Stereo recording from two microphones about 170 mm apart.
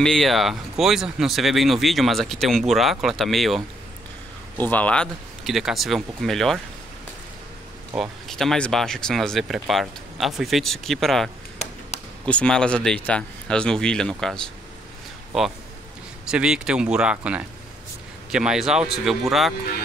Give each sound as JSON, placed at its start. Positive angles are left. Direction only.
{"t": 0.0, "sound": "speech", "side_deg": 0}
{"t": 4.6, "sound": "speech", "side_deg": 10}
{"t": 7.9, "sound": "speech", "side_deg": 0}
{"t": 11.5, "sound": "chop", "side_deg": 40}
{"t": 12.3, "sound": "speech", "side_deg": 5}
{"t": 16.3, "sound": "speech", "side_deg": -5}